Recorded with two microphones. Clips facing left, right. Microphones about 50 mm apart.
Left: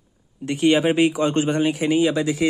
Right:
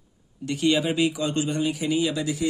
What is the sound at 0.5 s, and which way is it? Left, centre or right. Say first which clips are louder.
Speech: left 5 dB; left.